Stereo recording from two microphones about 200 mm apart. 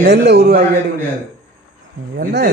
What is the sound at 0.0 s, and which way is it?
Speech, 55° right (ahead or behind).